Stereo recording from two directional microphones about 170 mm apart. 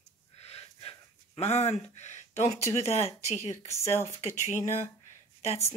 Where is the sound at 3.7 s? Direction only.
15° left (ahead or behind).